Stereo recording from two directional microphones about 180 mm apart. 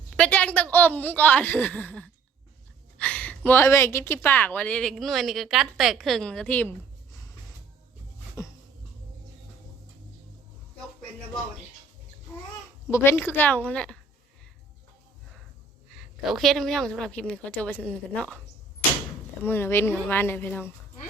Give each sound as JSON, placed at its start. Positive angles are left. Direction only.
{"t": 0.2, "sound": "a woman's voice", "side_deg": 10}
{"t": 8.4, "sound": "a sound", "side_deg": 15}
{"t": 12.9, "sound": "a woman's voice", "side_deg": 10}
{"t": 16.0, "sound": "a woman's voice", "side_deg": 0}
{"t": 19.4, "sound": "a woman's voice", "side_deg": 10}